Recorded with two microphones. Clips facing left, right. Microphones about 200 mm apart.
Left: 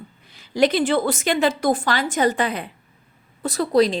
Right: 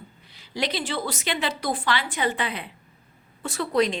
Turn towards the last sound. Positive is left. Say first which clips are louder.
# left 5 dB
turn(degrees=35)  # may be behind; listen again after turning